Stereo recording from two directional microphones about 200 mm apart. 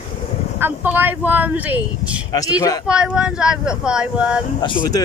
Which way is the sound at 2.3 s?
20° left (ahead or behind).